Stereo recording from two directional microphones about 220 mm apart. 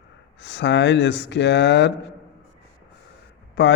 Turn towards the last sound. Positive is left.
turn(degrees=50)  # may be behind; listen again after turning